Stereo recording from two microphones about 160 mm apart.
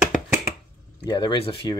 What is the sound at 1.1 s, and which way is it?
Speech, 30° left (ahead or behind).